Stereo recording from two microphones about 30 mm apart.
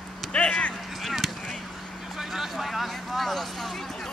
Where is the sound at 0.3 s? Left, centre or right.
Left.